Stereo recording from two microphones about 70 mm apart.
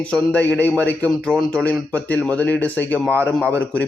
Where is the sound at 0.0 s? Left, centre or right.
Centre.